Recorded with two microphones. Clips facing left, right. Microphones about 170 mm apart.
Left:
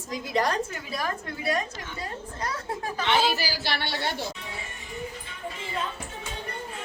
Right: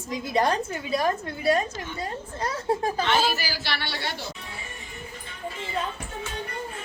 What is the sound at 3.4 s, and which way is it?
Speech, 40° left (ahead or behind).